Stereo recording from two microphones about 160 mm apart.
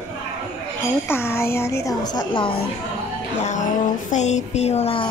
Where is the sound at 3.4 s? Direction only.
50° left (ahead or behind).